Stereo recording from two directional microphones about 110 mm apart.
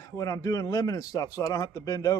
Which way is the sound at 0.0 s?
35° left (ahead or behind).